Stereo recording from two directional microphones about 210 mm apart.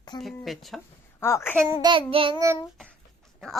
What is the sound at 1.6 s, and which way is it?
Child singing, 15° right (ahead or behind).